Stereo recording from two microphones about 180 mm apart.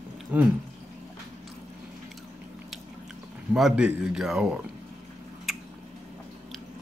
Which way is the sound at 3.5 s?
5° right (ahead or behind).